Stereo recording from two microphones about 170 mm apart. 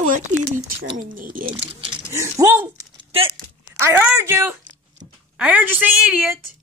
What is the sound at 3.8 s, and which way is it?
Speech, 15° right (ahead or behind).